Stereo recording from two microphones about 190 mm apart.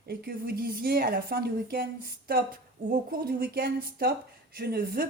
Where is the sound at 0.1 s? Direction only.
55° right (ahead or behind).